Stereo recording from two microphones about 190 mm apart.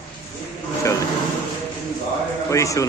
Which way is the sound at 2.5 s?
15° left (ahead or behind).